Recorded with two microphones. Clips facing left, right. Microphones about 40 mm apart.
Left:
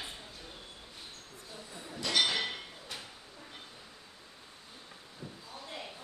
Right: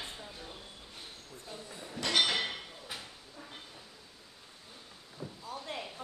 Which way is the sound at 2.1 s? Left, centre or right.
Centre.